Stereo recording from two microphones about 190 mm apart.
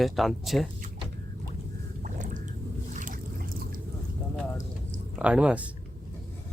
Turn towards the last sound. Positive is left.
turn(degrees=-5)  # may be behind; listen again after turning